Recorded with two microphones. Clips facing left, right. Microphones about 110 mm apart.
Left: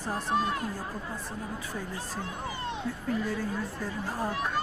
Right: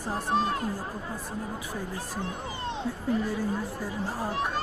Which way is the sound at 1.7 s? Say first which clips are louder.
Right 2 dB; 15° right (ahead or behind).